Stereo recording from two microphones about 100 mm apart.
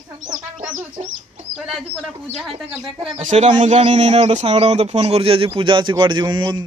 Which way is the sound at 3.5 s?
60° right (ahead or behind).